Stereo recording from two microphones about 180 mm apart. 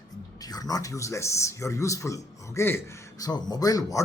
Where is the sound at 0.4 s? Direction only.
20° left (ahead or behind).